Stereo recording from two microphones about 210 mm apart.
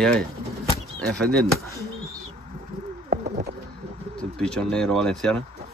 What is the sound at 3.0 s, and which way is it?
Bird, 45° right (ahead or behind).